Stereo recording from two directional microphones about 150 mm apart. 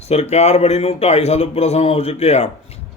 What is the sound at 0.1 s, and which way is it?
A man's voice, 45° left (ahead or behind).